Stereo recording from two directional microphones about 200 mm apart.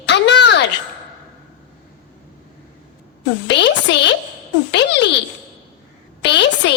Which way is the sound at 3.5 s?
60° left (ahead or behind).